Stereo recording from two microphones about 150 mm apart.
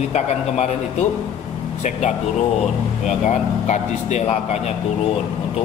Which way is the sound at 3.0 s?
50° left (ahead or behind).